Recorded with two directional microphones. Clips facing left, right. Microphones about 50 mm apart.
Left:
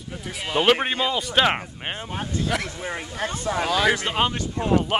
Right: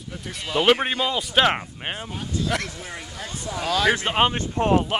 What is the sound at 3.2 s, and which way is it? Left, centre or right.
Speech, left.